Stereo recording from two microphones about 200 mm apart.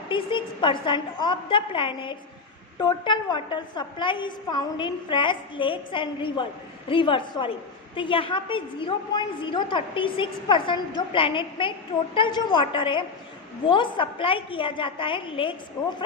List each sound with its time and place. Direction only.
0.1 s a woman's voice: 25° left (ahead or behind)